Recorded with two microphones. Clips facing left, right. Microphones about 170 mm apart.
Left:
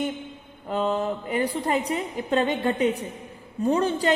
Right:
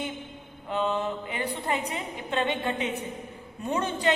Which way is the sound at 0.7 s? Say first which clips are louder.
Left 3 dB; 40° left (ahead or behind).